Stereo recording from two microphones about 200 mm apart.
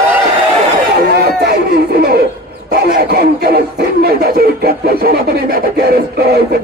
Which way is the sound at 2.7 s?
50° right (ahead or behind).